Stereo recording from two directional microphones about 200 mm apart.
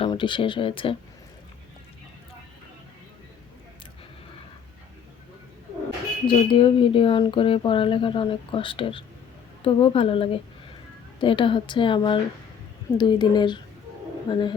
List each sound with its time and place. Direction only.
0.0 s speech: 25° left (ahead or behind)
6.2 s speech: 25° left (ahead or behind)